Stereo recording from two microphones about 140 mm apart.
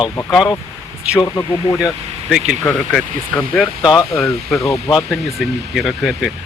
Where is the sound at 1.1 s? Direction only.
20° left (ahead or behind).